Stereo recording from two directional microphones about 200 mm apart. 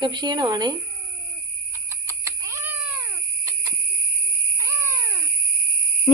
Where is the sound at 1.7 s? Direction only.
15° right (ahead or behind).